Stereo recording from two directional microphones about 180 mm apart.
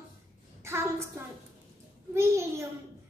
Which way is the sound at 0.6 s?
15° right (ahead or behind).